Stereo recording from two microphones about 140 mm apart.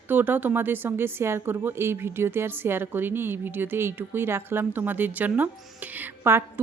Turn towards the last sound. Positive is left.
turn(degrees=-15)  # may be behind; listen again after turning